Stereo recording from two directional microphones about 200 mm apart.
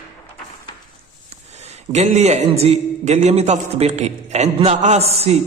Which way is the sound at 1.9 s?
35° right (ahead or behind).